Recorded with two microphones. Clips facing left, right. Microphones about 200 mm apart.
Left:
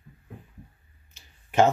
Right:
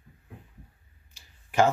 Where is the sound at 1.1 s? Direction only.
20° left (ahead or behind).